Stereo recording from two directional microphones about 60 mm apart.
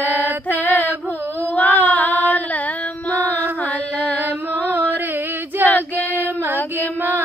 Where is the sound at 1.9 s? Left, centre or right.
Left.